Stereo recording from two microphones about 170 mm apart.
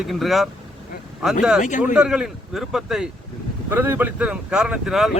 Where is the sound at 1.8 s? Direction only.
5° right (ahead or behind).